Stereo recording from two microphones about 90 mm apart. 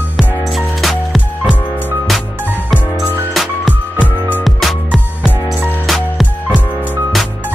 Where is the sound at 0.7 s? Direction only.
Centre (ahead or behind).